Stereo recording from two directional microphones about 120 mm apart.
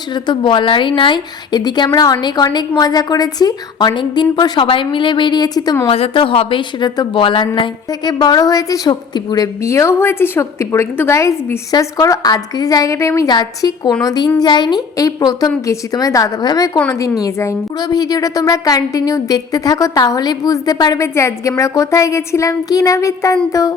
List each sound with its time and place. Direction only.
0.1 s a woman's voice: 40° left (ahead or behind)
5.9 s a woman's voice: 50° left (ahead or behind)
9.6 s a woman's voice: 20° left (ahead or behind)